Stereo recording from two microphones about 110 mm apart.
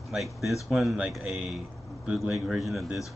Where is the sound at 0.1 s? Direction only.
Centre (ahead or behind).